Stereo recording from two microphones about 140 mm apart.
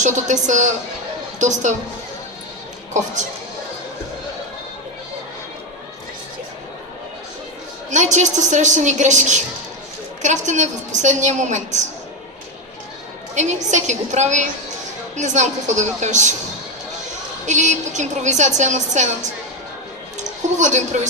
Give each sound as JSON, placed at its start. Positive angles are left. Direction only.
{"t": 0.0, "sound": "a woman's voice", "side_deg": -60}
{"t": 2.9, "sound": "a woman's voice", "side_deg": -60}
{"t": 7.9, "sound": "a woman's voice", "side_deg": -60}
{"t": 13.3, "sound": "a woman's voice", "side_deg": -55}
{"t": 17.4, "sound": "a woman's voice", "side_deg": -60}